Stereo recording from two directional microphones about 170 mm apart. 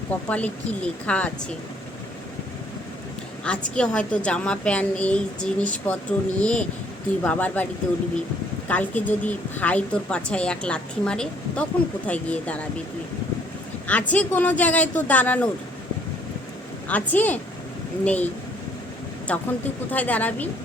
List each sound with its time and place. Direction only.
0.3 s a woman's voice: 10° left (ahead or behind)
3.4 s a woman's voice: 5° left (ahead or behind)
14.1 s a woman's voice: 10° left (ahead or behind)
16.9 s a woman's voice: 10° left (ahead or behind)
19.3 s a woman's voice: 10° left (ahead or behind)